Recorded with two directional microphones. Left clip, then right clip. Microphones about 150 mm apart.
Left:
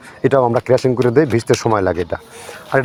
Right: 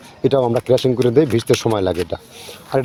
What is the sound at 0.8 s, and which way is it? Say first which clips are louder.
Speech: left 1 dB; 20° right (ahead or behind).